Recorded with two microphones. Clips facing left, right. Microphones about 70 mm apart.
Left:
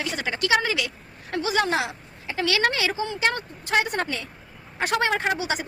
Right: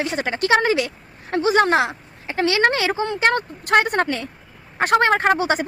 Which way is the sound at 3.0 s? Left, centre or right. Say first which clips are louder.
Right 6 dB; right.